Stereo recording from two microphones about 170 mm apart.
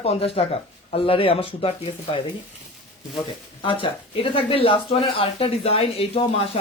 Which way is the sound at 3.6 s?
30° left (ahead or behind).